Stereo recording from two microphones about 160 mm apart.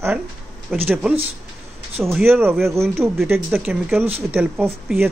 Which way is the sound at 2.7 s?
15° right (ahead or behind).